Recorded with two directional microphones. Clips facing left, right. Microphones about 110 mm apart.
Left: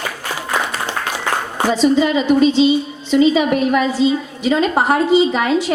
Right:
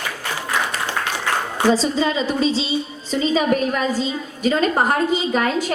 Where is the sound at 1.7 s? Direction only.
35° right (ahead or behind).